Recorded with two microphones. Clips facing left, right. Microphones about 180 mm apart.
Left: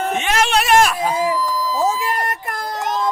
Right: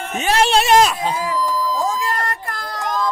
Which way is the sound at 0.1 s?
35° right (ahead or behind).